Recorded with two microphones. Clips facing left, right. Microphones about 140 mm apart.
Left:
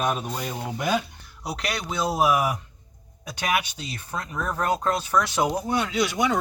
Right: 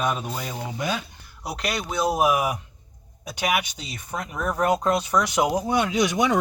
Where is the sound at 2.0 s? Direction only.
20° right (ahead or behind).